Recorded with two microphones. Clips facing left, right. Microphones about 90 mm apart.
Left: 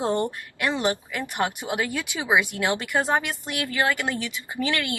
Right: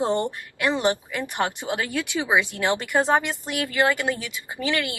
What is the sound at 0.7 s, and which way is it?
Speech, 15° right (ahead or behind).